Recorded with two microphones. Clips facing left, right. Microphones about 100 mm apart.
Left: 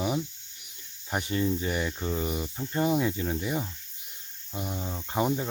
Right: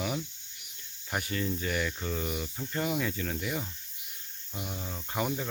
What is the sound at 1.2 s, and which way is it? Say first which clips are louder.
Speech: left 6 dB; 25° left (ahead or behind).